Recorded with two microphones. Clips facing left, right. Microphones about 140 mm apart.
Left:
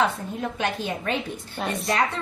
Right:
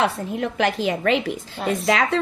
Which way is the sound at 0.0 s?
80° right.